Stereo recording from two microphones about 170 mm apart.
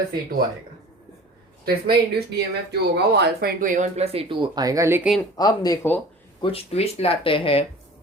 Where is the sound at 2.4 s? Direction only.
75° right (ahead or behind).